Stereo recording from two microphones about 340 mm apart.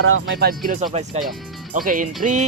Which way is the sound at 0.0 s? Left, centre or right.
Right.